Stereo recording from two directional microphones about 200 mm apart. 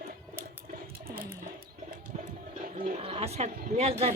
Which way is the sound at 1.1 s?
10° right (ahead or behind).